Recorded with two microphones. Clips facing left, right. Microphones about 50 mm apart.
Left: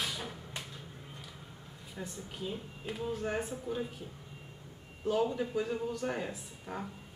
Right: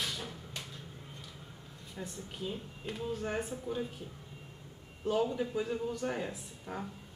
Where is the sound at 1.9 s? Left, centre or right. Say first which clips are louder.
Even; centre.